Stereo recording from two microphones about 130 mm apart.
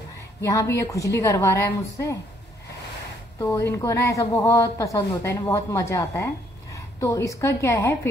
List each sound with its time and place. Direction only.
0.4 s speech: 25° left (ahead or behind)
3.4 s speech: 20° left (ahead or behind)